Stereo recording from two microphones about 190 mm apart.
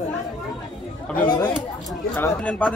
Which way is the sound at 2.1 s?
10° left (ahead or behind).